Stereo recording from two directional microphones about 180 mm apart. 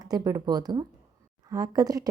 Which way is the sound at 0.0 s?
20° right (ahead or behind).